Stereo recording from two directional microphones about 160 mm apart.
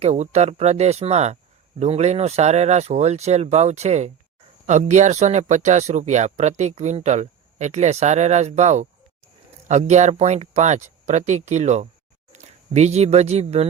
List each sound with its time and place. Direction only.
0.0 s speech: 45° right (ahead or behind)